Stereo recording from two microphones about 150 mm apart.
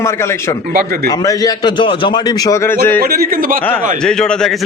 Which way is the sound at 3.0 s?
85° right.